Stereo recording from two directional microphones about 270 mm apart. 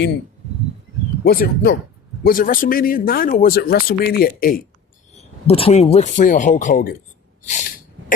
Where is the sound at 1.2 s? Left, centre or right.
Left.